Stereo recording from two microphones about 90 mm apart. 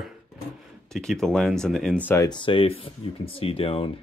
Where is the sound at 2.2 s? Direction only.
65° left (ahead or behind); by 3.9 s 90° left.